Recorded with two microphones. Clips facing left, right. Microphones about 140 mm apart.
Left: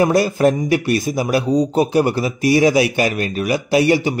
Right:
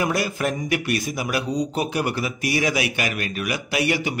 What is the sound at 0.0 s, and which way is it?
Speech, 35° left (ahead or behind).